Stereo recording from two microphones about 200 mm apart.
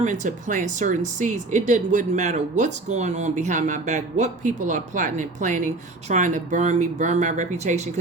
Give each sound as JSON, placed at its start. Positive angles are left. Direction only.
{"t": 0.0, "sound": "speech", "side_deg": -35}